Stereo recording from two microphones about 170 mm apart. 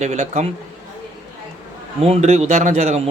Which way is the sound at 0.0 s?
40° right (ahead or behind).